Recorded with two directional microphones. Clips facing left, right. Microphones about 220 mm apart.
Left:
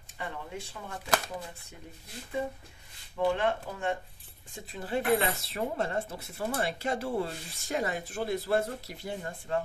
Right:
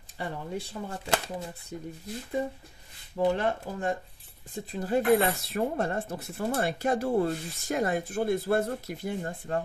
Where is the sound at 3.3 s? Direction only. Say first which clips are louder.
Right 1 dB; 40° right (ahead or behind).